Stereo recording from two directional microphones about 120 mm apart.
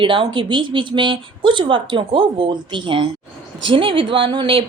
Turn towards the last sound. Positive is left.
turn(degrees=-45)  # may be behind; listen again after turning